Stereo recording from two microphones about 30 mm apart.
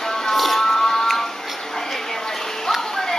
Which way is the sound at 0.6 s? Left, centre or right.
Centre.